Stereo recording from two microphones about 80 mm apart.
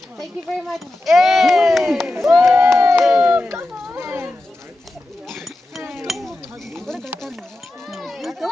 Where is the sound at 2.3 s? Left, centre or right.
Right.